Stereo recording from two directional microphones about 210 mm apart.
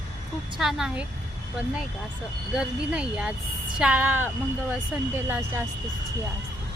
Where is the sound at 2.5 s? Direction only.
5° right (ahead or behind).